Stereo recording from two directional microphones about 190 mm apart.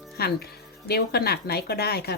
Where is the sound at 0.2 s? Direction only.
55° left (ahead or behind).